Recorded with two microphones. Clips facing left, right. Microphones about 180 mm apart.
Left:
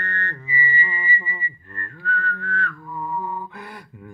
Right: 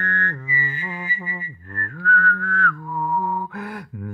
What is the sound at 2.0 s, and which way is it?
Whistling, 55° right (ahead or behind).